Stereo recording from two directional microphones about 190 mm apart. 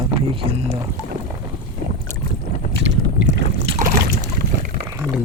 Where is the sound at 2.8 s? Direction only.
70° right (ahead or behind).